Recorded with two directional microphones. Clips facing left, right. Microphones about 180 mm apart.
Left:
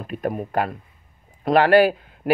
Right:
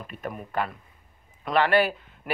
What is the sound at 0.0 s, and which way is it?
Speech, 40° left (ahead or behind).